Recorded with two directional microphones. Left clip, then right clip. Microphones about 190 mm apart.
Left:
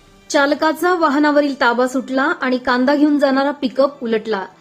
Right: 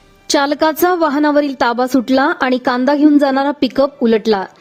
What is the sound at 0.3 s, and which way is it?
A woman's voice, 50° right (ahead or behind).